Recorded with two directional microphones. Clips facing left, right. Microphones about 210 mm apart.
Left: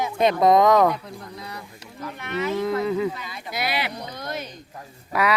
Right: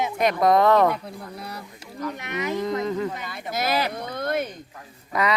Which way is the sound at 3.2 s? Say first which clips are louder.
Right 2 dB; 55° right (ahead or behind).